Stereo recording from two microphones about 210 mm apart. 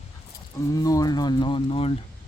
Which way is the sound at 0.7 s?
15° left (ahead or behind).